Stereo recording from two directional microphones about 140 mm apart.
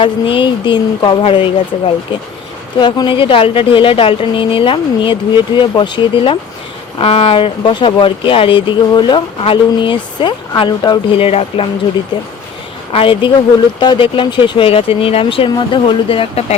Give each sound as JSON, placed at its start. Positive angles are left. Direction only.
{"t": 0.0, "sound": "speech", "side_deg": 35}
{"t": 2.7, "sound": "speech", "side_deg": 35}